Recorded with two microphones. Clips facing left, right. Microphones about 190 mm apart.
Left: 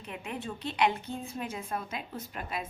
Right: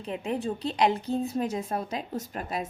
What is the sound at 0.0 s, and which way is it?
A woman's voice, 35° right (ahead or behind).